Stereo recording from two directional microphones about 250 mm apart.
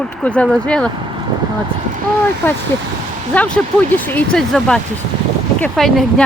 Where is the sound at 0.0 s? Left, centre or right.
Centre.